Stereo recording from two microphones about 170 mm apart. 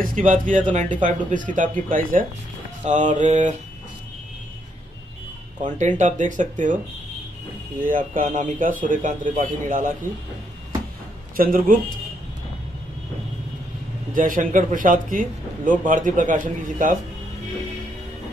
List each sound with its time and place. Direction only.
0.0 s a man's voice: 50° right (ahead or behind)
5.6 s a man's voice: 45° right (ahead or behind)
7.8 s a man's voice: 50° right (ahead or behind)
11.3 s a man's voice: 55° right (ahead or behind)
14.1 s a man's voice: 55° right (ahead or behind)